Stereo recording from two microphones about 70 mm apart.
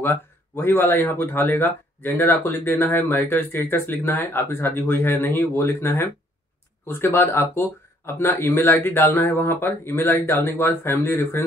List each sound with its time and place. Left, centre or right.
0.0 s speech: left